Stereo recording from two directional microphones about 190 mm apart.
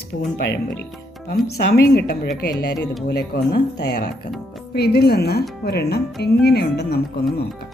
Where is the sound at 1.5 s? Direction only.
55° left (ahead or behind).